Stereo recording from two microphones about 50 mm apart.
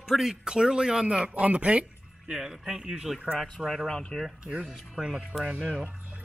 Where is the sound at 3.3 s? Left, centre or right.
Centre.